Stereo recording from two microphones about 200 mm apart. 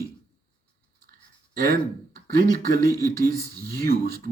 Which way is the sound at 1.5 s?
45° right (ahead or behind).